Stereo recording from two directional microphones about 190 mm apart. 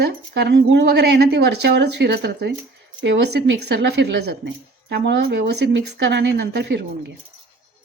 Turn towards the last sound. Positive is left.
turn(degrees=-65)  # may be behind; listen again after turning